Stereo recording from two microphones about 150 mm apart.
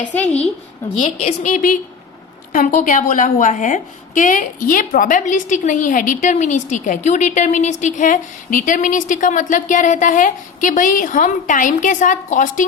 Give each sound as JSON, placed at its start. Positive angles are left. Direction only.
{"t": 1.0, "sound": "a woman's voice", "side_deg": 55}